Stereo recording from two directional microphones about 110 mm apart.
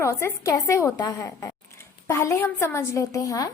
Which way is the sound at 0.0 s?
25° left (ahead or behind).